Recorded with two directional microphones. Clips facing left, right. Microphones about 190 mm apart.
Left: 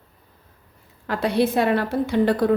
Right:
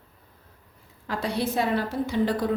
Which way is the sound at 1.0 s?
65° left (ahead or behind).